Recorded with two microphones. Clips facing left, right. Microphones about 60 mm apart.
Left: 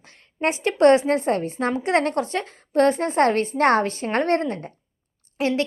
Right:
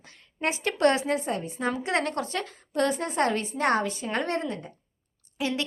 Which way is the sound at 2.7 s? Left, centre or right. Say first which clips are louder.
Left 7 dB; left.